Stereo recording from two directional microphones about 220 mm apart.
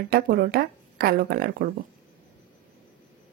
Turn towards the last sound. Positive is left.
turn(degrees=-40)  # may be behind; listen again after turning